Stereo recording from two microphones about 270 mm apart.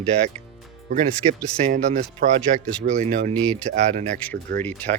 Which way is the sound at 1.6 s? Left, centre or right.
Right.